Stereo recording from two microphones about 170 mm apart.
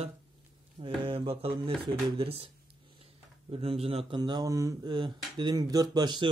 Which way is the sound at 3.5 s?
35° right (ahead or behind).